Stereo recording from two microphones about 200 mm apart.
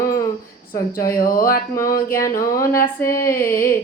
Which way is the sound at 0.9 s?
45° left (ahead or behind).